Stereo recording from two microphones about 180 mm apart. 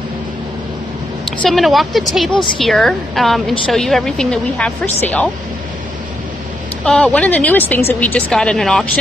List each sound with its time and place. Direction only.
1.4 s a woman's voice: centre (ahead or behind)
6.8 s a woman's voice: 5° left (ahead or behind)